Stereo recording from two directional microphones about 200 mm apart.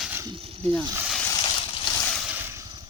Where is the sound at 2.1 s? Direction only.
5° right (ahead or behind).